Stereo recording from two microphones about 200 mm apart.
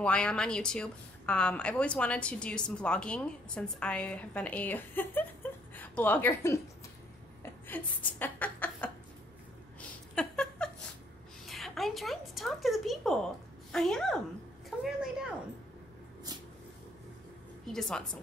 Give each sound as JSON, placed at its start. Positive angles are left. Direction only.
{"t": 0.0, "sound": "a woman's voice", "side_deg": 5}
{"t": 7.4, "sound": "a sound", "side_deg": 10}
{"t": 13.7, "sound": "a woman's voice", "side_deg": 0}
{"t": 14.7, "sound": "a sound", "side_deg": 0}
{"t": 16.3, "sound": "vehicle", "side_deg": -20}
{"t": 17.7, "sound": "a woman's voice", "side_deg": 0}